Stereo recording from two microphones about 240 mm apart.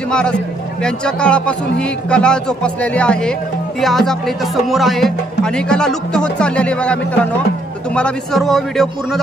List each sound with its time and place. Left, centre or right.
0.8 s speech: centre